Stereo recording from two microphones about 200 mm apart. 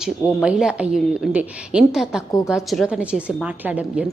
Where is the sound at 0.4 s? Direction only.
5° right (ahead or behind).